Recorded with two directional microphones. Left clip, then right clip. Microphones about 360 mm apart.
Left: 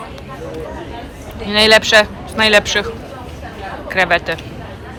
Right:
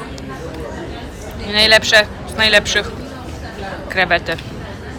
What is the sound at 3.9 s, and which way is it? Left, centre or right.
Speech, centre.